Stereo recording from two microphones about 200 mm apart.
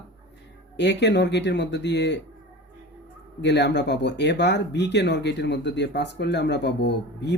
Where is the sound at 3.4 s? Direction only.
60° left (ahead or behind).